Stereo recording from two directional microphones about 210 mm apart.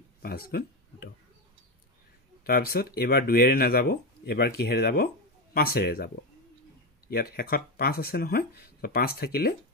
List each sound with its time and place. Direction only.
0.2 s speech: 45° left (ahead or behind)
2.4 s speech: 45° left (ahead or behind)